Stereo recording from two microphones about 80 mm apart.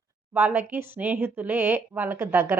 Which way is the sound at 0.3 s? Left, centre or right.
Right.